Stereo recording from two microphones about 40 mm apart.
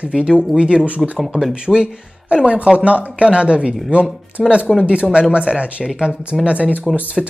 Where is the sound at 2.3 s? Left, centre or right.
Right.